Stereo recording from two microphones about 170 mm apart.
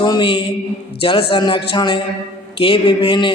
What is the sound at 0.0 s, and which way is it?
Speech, 25° left (ahead or behind).